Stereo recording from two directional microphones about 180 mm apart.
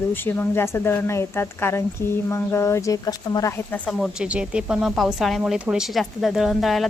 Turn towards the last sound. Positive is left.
turn(degrees=0)  # may be behind; listen again after turning